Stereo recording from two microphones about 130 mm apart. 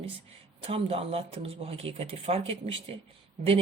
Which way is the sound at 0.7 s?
50° right (ahead or behind).